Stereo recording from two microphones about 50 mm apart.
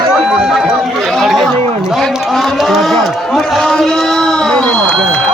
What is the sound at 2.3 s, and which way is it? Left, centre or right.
Cattle, centre.